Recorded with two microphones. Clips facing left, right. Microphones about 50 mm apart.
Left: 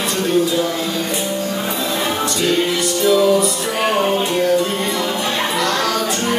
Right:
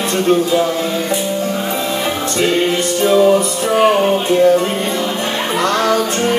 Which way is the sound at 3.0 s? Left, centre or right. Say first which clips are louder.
Right 3 dB; right.